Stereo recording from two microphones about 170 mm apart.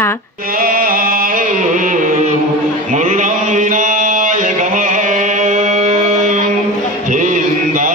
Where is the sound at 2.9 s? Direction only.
45° right (ahead or behind).